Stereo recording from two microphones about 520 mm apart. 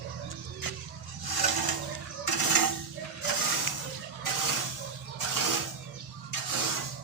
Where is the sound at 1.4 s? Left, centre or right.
Right.